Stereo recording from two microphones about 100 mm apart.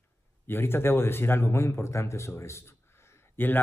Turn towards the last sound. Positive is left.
turn(degrees=20)  # may be behind; listen again after turning